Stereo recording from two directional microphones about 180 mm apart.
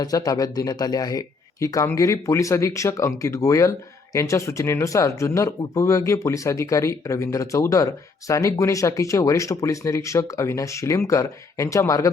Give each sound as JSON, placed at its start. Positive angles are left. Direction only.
{"t": 0.0, "sound": "speech", "side_deg": 20}